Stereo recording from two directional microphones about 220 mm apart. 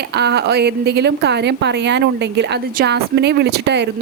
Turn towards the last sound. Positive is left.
turn(degrees=-50)  # may be behind; listen again after turning